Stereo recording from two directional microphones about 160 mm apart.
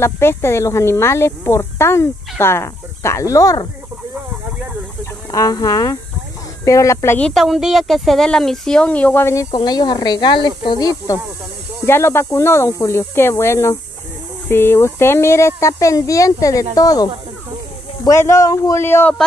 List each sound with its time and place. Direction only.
0.0 s a woman's voice: 15° left (ahead or behind)
5.3 s a man's voice: 20° left (ahead or behind)